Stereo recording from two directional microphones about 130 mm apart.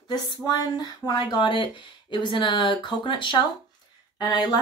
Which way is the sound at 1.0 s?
35° left (ahead or behind).